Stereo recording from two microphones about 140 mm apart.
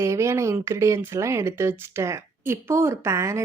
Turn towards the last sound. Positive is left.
turn(degrees=-20)  # may be behind; listen again after turning